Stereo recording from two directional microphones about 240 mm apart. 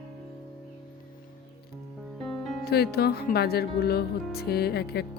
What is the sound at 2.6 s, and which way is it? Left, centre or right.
Speech, left.